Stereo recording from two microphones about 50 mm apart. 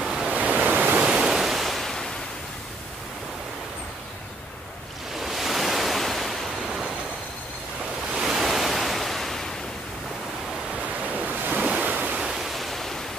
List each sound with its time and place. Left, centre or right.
0.0 s waves: centre
0.3 s waves: right
1.2 s waves: centre
5.2 s waves: centre
8.1 s waves: centre
11.1 s waves: right
12.2 s pink noise: centre